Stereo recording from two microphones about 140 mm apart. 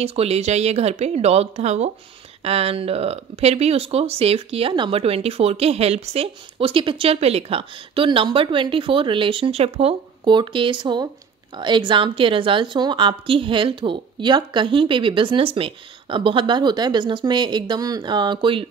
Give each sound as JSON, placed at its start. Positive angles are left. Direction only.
{"t": 0.0, "sound": "a woman's voice", "side_deg": -45}